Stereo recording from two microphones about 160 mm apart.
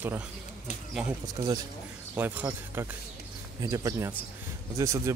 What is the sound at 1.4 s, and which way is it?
Speech, 30° right (ahead or behind).